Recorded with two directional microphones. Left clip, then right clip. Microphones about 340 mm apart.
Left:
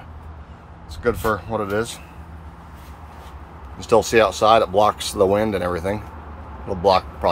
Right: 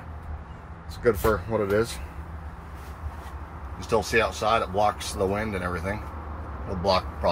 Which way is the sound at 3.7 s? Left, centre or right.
Centre.